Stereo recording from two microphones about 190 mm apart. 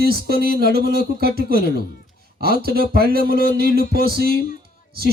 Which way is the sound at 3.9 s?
55° right (ahead or behind).